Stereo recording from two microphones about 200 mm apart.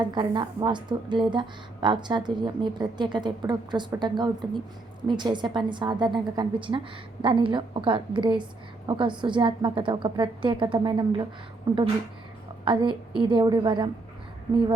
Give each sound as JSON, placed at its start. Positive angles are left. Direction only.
{"t": 0.0, "sound": "a woman's voice", "side_deg": -20}